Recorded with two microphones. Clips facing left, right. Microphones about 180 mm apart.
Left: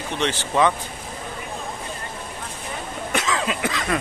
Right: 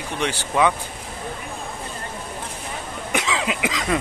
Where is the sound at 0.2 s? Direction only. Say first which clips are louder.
Even; 10° right (ahead or behind).